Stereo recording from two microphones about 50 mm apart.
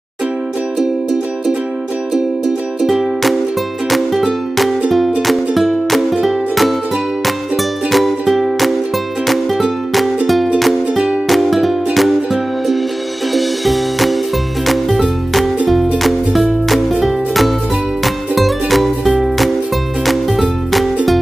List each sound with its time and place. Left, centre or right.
2.8 s music: centre